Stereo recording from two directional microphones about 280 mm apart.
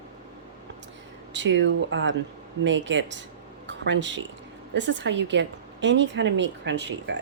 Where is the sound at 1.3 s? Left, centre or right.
Right.